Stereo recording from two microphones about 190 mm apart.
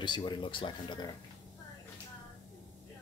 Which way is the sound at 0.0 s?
25° left (ahead or behind).